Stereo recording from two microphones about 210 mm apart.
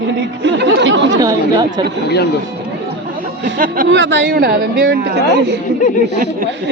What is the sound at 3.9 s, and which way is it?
Speech, 60° right (ahead or behind).